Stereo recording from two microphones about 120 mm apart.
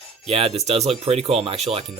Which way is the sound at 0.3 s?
55° right (ahead or behind).